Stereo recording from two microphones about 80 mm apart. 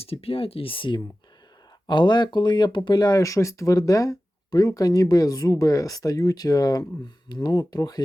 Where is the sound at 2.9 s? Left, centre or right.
Left.